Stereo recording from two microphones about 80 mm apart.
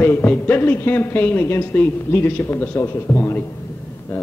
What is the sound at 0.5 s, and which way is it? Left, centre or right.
A man's voice, left.